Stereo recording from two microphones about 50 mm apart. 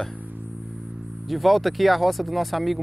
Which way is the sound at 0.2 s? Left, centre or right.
Right.